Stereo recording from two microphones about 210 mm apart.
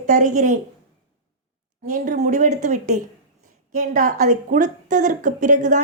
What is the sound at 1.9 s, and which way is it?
A woman's voice, 40° right (ahead or behind).